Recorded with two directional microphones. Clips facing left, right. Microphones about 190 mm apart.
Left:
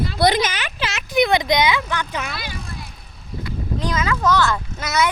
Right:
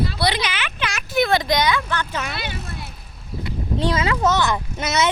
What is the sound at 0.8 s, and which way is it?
Speech, 25° left (ahead or behind).